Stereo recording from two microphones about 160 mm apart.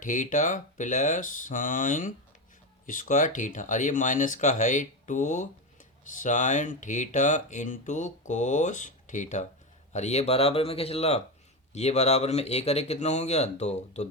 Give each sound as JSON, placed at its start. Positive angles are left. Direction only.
{"t": 0.0, "sound": "speech", "side_deg": 55}